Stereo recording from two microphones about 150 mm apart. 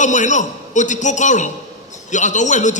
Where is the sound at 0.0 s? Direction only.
55° left (ahead or behind).